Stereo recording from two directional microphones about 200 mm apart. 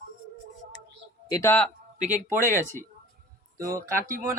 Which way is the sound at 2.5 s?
10° left (ahead or behind).